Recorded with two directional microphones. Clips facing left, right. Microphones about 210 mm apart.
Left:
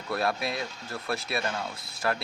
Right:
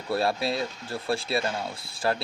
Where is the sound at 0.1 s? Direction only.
30° right (ahead or behind).